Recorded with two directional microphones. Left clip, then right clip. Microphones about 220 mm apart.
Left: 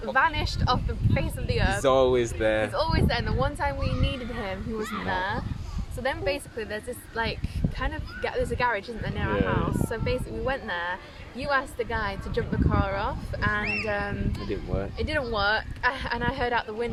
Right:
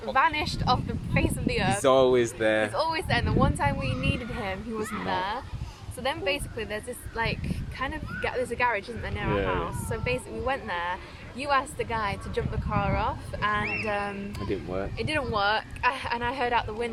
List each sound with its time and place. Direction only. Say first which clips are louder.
0.1 s speech: even; centre (ahead or behind)
1.8 s speech: right 1 dB; 20° right (ahead or behind)
2.7 s speech: even; 5° left (ahead or behind)
4.8 s speech: left 2 dB; 25° left (ahead or behind)
5.0 s speech: even; centre (ahead or behind)
14.5 s speech: right 1 dB; 20° right (ahead or behind)
14.9 s speech: even; centre (ahead or behind)